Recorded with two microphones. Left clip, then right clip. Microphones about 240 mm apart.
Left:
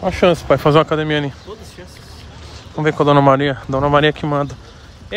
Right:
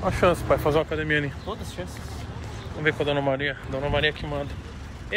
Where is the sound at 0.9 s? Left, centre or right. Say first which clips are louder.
Left 7 dB; left.